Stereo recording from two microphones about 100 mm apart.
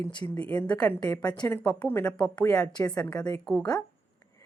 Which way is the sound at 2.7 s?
45° left (ahead or behind).